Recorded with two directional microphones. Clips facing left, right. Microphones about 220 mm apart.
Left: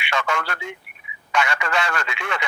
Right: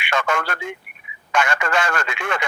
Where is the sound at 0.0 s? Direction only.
50° right (ahead or behind).